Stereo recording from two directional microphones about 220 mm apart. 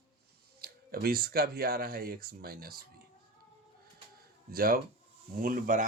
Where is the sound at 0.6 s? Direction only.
45° right (ahead or behind).